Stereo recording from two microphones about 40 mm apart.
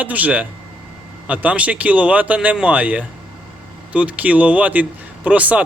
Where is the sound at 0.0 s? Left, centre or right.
Right.